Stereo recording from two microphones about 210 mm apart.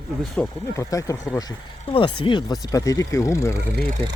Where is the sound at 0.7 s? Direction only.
15° left (ahead or behind).